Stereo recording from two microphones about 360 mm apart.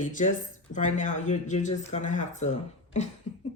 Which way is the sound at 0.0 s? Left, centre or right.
Left.